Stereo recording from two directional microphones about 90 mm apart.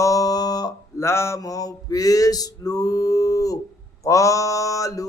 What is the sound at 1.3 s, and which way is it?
Speech, 40° left (ahead or behind).